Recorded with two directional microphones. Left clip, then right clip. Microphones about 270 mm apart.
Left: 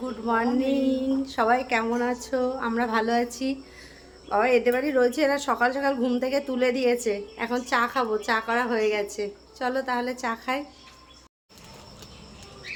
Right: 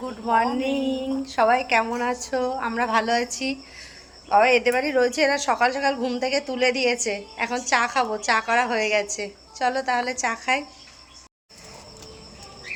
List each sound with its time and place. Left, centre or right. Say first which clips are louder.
0.0 s a woman's voice: right 4 dB; centre